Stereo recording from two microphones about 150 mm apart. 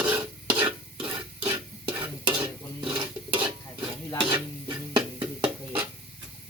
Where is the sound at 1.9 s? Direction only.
30° right (ahead or behind).